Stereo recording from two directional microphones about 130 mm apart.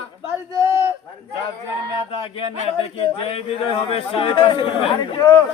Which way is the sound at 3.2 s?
45° left (ahead or behind).